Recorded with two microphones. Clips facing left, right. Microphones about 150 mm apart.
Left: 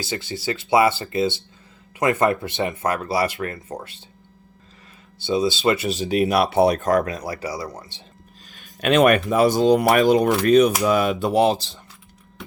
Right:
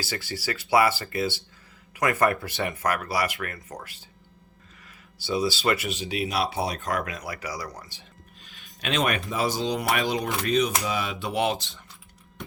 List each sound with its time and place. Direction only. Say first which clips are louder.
0.0 s speech: left 5 dB; 20° left (ahead or behind)
5.2 s speech: left 5 dB; 20° left (ahead or behind)
5.9 s speech: left 9 dB; 40° left (ahead or behind); by 8.0 s 25° left (ahead or behind)
8.4 s speech: left 10 dB; 45° left (ahead or behind)